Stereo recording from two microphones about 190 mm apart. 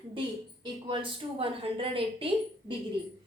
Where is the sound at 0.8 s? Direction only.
25° right (ahead or behind).